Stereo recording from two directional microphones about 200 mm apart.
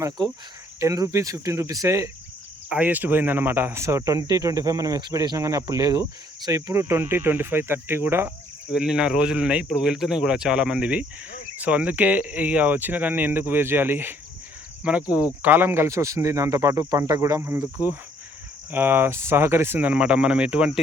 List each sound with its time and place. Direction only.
0.2 s speech: 20° right (ahead or behind)
15.4 s speech: 10° right (ahead or behind)